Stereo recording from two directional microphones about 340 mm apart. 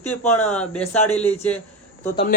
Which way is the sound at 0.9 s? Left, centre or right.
Centre.